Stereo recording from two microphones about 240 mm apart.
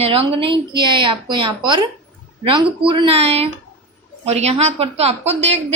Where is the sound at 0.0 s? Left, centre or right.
Right.